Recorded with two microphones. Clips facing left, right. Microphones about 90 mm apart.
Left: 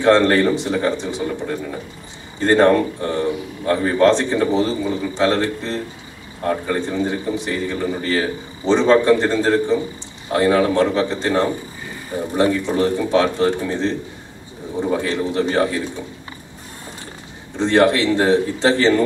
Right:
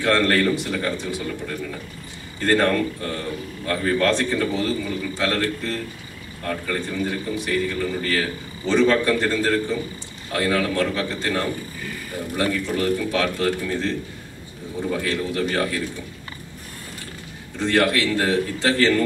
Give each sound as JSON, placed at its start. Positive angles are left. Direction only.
{"t": 0.0, "sound": "a man's voice", "side_deg": 25}
{"t": 17.6, "sound": "a man's voice", "side_deg": 25}